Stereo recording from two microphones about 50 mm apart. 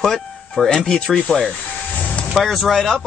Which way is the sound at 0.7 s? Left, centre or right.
Centre.